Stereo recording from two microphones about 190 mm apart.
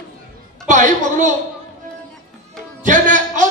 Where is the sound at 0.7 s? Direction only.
40° right (ahead or behind).